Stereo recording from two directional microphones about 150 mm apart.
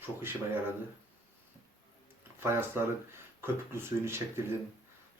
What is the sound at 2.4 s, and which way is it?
Speech, 15° right (ahead or behind).